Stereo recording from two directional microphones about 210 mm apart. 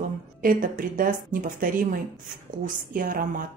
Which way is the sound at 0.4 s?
40° right (ahead or behind).